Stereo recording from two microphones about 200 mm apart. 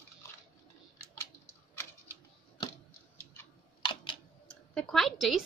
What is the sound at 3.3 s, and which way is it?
Typing, 20° left (ahead or behind).